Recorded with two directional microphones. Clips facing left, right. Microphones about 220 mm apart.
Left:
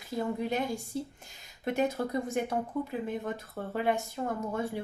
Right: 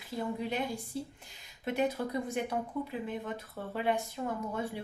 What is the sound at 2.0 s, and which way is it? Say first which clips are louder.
Speech: left 3 dB; 40° left (ahead or behind).